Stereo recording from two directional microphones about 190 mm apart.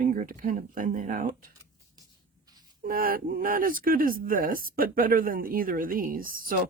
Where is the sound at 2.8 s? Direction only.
50° right (ahead or behind).